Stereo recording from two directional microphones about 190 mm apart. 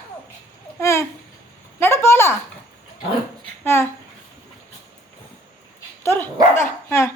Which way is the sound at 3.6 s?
10° left (ahead or behind).